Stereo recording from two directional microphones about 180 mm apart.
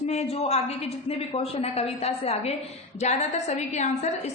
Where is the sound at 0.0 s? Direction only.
40° left (ahead or behind).